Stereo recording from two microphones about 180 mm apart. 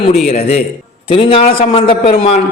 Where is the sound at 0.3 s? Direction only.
35° left (ahead or behind).